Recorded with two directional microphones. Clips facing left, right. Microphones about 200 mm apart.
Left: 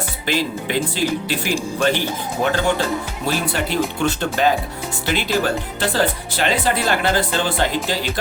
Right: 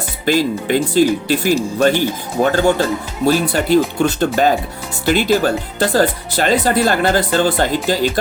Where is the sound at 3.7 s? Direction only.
40° right (ahead or behind).